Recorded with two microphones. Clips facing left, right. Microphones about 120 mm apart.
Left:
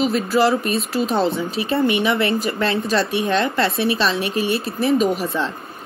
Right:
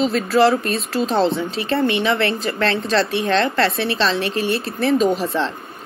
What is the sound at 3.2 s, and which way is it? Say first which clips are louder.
Speech: right 1 dB; 10° left (ahead or behind).